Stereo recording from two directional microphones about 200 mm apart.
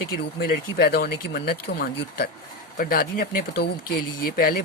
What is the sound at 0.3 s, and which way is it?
Speech, 50° left (ahead or behind).